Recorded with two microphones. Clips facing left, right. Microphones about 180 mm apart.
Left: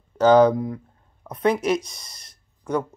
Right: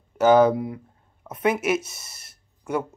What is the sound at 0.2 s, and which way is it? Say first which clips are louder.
Speech: left 1 dB; 10° right (ahead or behind).